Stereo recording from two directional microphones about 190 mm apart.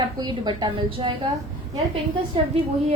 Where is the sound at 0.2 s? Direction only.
25° right (ahead or behind).